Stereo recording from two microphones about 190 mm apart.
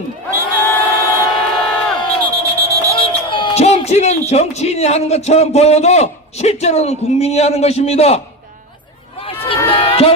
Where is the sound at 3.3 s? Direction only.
30° left (ahead or behind).